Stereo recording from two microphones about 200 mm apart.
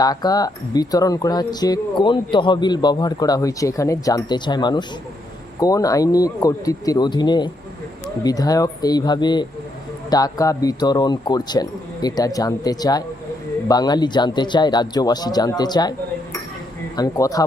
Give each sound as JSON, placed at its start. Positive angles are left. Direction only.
{"t": 0.0, "sound": "speech", "side_deg": 20}
{"t": 17.0, "sound": "speech", "side_deg": 15}